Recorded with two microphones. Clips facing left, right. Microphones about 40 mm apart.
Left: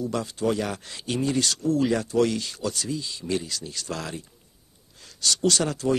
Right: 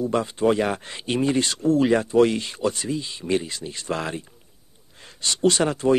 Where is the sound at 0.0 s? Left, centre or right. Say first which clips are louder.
Right 5 dB; right.